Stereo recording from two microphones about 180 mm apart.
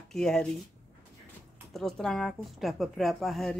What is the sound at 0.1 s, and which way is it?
Speech, 5° left (ahead or behind).